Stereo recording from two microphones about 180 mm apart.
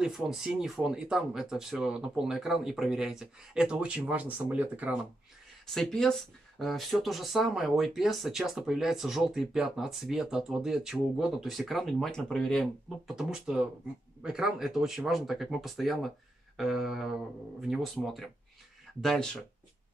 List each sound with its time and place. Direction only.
0.0 s speech: centre (ahead or behind)
5.7 s speech: 5° left (ahead or behind)